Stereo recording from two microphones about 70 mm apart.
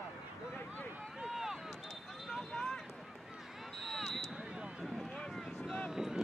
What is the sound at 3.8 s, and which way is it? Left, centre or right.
Vehicle, centre.